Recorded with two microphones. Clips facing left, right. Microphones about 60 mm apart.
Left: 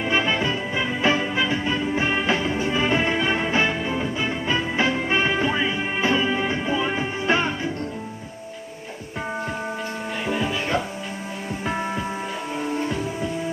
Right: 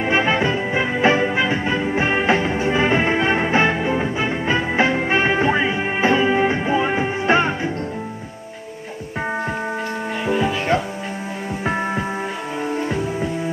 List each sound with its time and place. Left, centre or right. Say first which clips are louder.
0.0 s music: right 4 dB; right
10.3 s music: right 5 dB; centre
11.6 s music: right 4 dB; right